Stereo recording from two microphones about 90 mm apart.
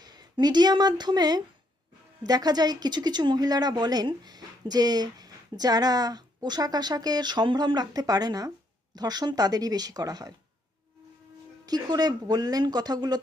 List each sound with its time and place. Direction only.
0.0 s a woman's voice: 50° right (ahead or behind)
11.6 s a woman's voice: 50° right (ahead or behind)